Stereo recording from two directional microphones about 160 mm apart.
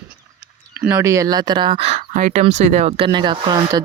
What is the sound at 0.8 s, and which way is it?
Speech, 15° right (ahead or behind).